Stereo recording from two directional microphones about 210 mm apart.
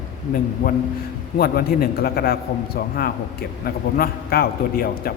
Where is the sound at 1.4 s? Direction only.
45° left (ahead or behind).